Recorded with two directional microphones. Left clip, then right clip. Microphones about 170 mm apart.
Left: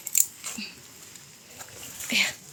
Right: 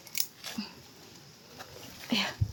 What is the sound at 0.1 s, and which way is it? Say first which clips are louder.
Scissors: left 8 dB; 20° right (ahead or behind).